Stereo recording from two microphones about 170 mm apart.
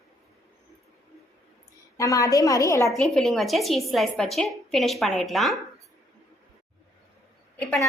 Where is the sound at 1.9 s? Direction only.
20° left (ahead or behind).